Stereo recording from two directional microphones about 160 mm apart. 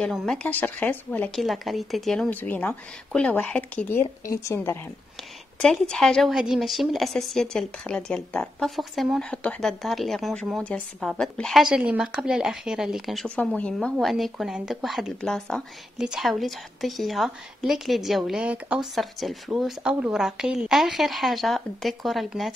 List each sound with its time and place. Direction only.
0.0 s a woman's voice: 5° left (ahead or behind)
4.0 s speech: 20° left (ahead or behind)
5.6 s a woman's voice: 5° left (ahead or behind)